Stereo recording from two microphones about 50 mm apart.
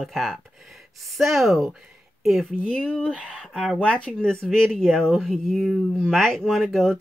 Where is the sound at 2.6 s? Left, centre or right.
Centre.